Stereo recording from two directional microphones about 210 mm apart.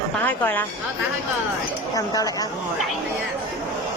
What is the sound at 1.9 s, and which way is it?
Speech, 15° left (ahead or behind).